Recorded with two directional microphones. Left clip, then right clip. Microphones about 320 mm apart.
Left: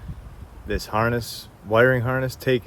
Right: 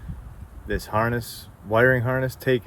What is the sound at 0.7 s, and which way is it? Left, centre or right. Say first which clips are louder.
Speech: left 1 dB; centre.